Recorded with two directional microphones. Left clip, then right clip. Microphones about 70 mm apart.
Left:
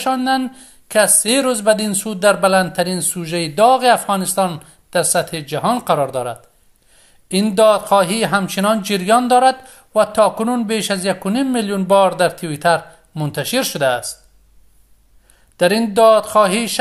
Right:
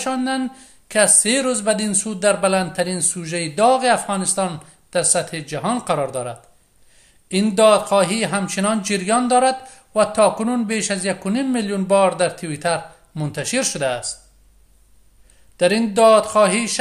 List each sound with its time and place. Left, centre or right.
0.0 s speech: left
15.5 s speech: left